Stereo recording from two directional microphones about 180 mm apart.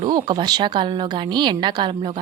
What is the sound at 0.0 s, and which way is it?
A woman's voice, 25° right (ahead or behind).